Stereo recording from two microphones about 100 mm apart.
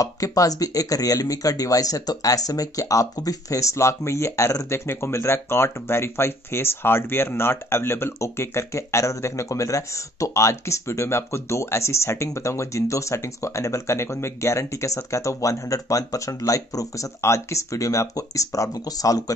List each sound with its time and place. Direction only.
0.0 s speech: 35° left (ahead or behind)